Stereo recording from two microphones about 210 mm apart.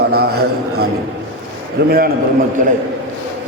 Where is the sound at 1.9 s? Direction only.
45° right (ahead or behind).